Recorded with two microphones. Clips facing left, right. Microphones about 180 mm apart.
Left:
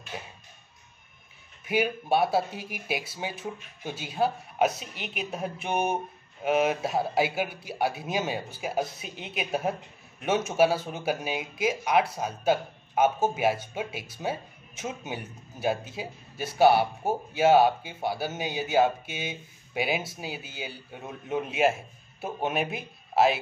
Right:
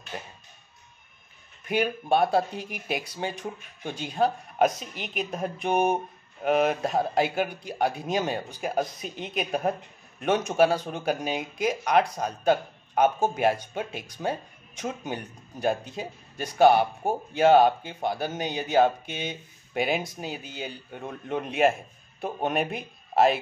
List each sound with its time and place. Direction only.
0.1 s speech: 5° left (ahead or behind)
1.6 s speech: 5° left (ahead or behind)